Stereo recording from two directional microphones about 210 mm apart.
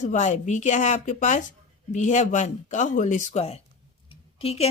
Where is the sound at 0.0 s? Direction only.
35° left (ahead or behind).